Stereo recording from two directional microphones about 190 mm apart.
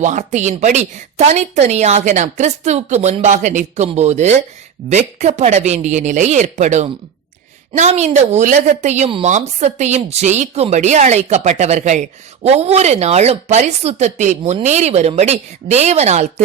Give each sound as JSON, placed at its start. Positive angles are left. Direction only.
{"t": 0.0, "sound": "a woman's voice", "side_deg": -40}